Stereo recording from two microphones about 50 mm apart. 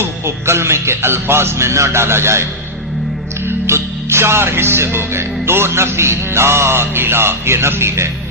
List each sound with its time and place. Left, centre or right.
0.0 s music: right